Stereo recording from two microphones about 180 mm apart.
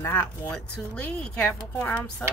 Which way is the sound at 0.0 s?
15° left (ahead or behind).